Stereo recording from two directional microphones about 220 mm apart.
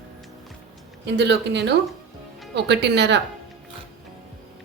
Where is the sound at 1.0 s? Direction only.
50° right (ahead or behind).